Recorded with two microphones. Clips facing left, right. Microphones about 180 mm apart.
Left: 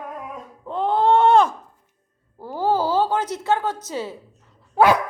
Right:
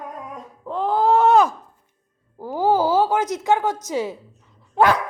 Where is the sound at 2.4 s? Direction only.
15° right (ahead or behind).